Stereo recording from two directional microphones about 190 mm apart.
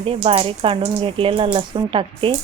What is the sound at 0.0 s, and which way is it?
Speech, 30° right (ahead or behind).